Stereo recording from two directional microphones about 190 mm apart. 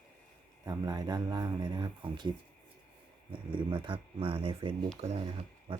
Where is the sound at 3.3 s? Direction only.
25° right (ahead or behind).